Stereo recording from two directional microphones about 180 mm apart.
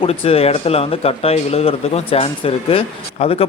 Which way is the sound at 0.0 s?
30° left (ahead or behind).